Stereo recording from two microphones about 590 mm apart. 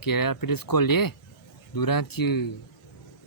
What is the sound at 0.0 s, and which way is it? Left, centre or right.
Speech, left.